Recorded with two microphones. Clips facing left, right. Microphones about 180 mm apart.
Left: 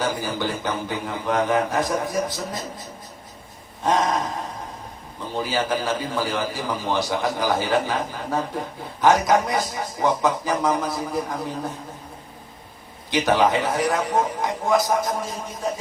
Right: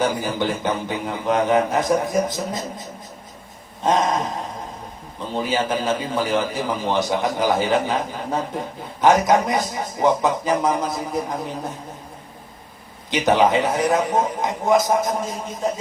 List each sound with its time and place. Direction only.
0.0 s a man's voice: 20° right (ahead or behind)
3.8 s a man's voice: 20° right (ahead or behind)
13.1 s a man's voice: 20° right (ahead or behind)